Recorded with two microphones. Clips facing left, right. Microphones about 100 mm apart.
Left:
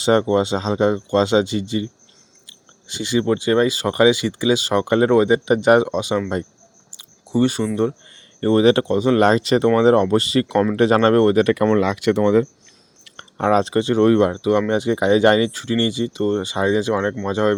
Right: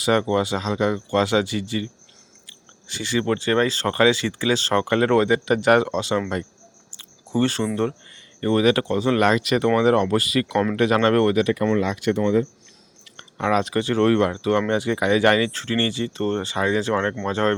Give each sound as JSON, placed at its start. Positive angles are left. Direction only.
{"t": 0.0, "sound": "speech", "side_deg": 25}
{"t": 2.9, "sound": "speech", "side_deg": 20}
{"t": 6.9, "sound": "a sound", "side_deg": 15}
{"t": 8.4, "sound": "speech", "side_deg": 30}
{"t": 11.4, "sound": "speech", "side_deg": 60}
{"t": 13.3, "sound": "speech", "side_deg": 35}